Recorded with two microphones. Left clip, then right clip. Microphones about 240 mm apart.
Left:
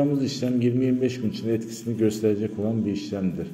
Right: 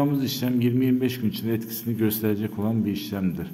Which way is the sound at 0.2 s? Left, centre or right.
Right.